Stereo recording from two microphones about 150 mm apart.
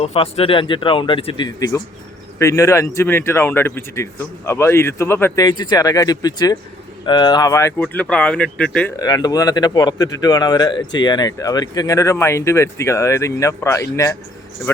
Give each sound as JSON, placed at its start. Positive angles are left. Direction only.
{"t": 0.0, "sound": "speech", "side_deg": 40}
{"t": 7.8, "sound": "speech", "side_deg": 5}
{"t": 9.0, "sound": "speech", "side_deg": 25}